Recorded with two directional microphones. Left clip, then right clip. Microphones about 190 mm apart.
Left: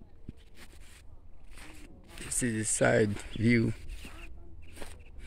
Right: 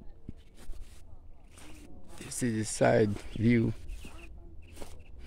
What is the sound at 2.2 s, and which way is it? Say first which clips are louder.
Speech: left 1 dB; 5° right (ahead or behind).